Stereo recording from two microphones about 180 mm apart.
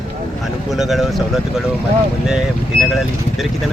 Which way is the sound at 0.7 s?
Centre (ahead or behind).